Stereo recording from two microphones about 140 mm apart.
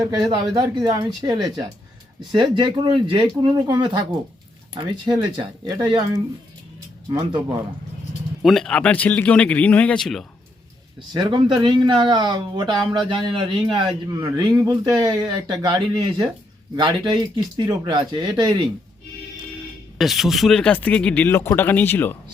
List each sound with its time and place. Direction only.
0.0 s speech: 30° right (ahead or behind)
8.4 s speech: centre (ahead or behind)
11.1 s speech: 35° right (ahead or behind)
20.0 s speech: centre (ahead or behind); by 22.2 s 15° left (ahead or behind)